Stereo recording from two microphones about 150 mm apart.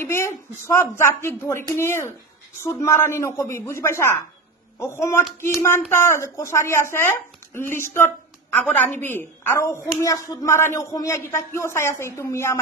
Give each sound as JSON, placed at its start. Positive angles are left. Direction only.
{"t": 0.0, "sound": "a man's voice", "side_deg": 15}